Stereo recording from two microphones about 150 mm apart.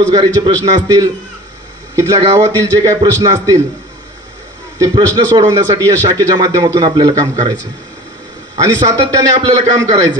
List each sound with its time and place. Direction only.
0.1 s a man's voice: 25° right (ahead or behind)
4.7 s a man's voice: 25° right (ahead or behind)
8.5 s a man's voice: 25° right (ahead or behind)